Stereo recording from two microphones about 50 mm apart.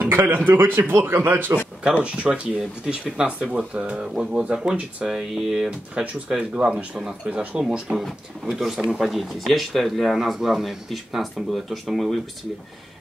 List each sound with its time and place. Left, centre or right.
0.0 s a man's voice: right
2.0 s speech: right
5.7 s speech: right
8.5 s speech: centre